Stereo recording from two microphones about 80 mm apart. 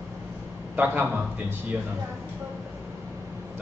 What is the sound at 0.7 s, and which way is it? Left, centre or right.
Speech, right.